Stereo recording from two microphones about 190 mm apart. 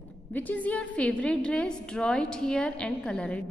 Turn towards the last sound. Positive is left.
turn(degrees=5)  # may be behind; listen again after turning